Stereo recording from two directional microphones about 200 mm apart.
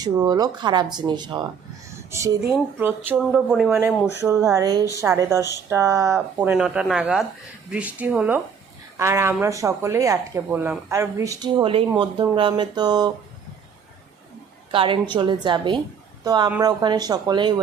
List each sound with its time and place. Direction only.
0.0 s speech: 20° right (ahead or behind)
14.7 s a woman's voice: 25° right (ahead or behind)